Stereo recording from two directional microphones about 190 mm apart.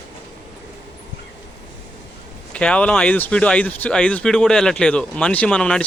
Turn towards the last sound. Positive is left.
turn(degrees=5)  # may be behind; listen again after turning